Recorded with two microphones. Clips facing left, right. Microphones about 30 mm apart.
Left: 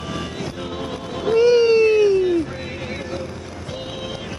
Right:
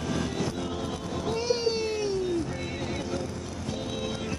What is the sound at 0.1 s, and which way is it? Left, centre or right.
Vehicle, left.